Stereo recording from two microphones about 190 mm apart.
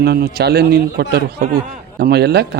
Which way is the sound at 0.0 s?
55° right (ahead or behind).